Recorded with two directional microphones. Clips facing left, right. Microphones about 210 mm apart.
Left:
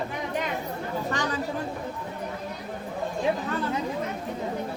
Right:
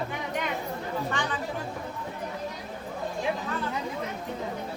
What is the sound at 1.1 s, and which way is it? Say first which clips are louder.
Chatter: left 2 dB; 40° left (ahead or behind).